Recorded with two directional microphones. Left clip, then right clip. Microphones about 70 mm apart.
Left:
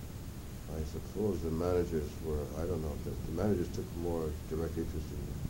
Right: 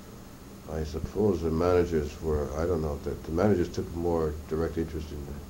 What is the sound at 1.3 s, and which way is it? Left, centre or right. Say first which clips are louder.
Speech: right 8 dB; left.